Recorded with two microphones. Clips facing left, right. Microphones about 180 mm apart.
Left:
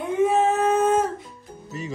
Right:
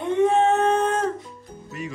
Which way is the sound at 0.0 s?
5° left (ahead or behind).